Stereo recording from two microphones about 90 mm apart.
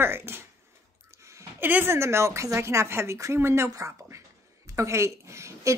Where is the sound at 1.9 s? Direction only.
30° right (ahead or behind).